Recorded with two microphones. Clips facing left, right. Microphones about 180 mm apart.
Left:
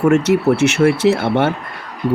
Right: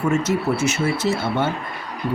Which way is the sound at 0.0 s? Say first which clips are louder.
Left 7 dB; 70° left (ahead or behind).